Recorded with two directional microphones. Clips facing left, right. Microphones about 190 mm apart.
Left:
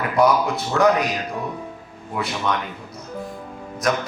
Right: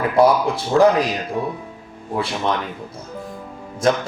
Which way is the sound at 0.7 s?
30° right (ahead or behind).